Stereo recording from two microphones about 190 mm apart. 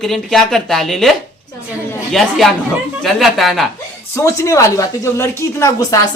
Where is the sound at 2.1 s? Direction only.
Centre (ahead or behind).